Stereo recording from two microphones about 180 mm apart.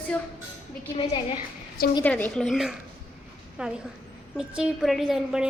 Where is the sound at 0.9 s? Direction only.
30° left (ahead or behind).